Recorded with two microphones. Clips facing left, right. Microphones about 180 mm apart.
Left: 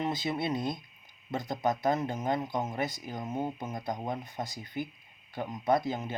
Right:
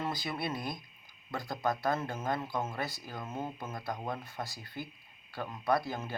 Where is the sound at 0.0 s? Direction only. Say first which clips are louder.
Left 4 dB; 20° left (ahead or behind).